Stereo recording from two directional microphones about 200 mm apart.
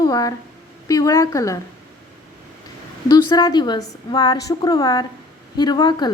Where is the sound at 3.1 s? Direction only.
20° left (ahead or behind).